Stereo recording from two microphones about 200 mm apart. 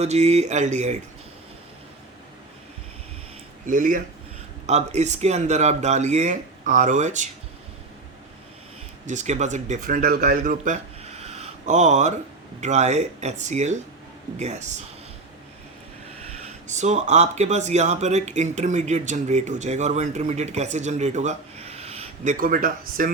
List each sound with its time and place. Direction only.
0.0 s speech: 35° right (ahead or behind)
3.7 s speech: 40° right (ahead or behind)
9.0 s speech: 35° right (ahead or behind)
11.2 s a sound: 30° right (ahead or behind)
12.5 s speech: 35° right (ahead or behind)
16.6 s speech: 35° right (ahead or behind)